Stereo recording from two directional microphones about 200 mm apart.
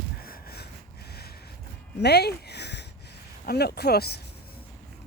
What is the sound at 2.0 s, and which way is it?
Speech, 55° left (ahead or behind).